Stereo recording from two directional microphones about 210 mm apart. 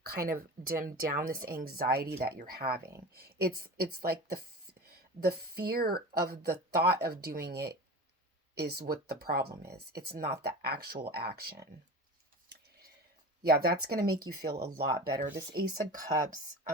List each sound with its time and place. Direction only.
0.1 s speech: 45° right (ahead or behind)
13.4 s speech: 45° right (ahead or behind)